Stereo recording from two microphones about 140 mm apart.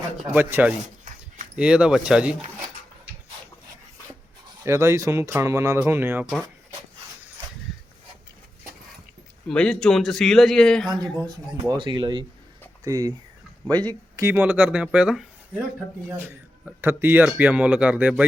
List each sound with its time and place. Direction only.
0.3 s speech: 10° right (ahead or behind)
4.6 s speech: 20° right (ahead or behind)
9.5 s a man's voice: 5° left (ahead or behind)
10.8 s speech: 25° right (ahead or behind)
14.2 s speech: 15° right (ahead or behind)